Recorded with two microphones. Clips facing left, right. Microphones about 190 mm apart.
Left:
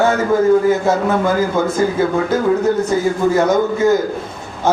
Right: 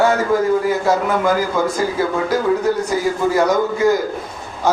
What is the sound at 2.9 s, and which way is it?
A man's voice, 25° left (ahead or behind).